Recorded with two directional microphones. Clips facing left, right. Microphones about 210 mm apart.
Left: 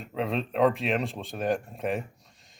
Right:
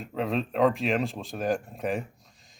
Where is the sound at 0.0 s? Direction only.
Centre (ahead or behind).